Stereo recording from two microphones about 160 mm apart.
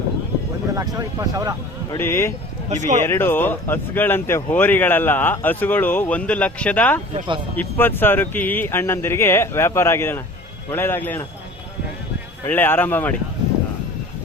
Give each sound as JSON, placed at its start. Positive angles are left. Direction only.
{"t": 0.8, "sound": "speech", "side_deg": -20}
{"t": 2.0, "sound": "speech", "side_deg": 15}
{"t": 2.6, "sound": "speech", "side_deg": -50}
{"t": 3.0, "sound": "speech", "side_deg": 15}
{"t": 12.5, "sound": "speech", "side_deg": 15}